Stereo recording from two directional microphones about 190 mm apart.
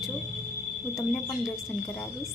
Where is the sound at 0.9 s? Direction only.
Centre (ahead or behind).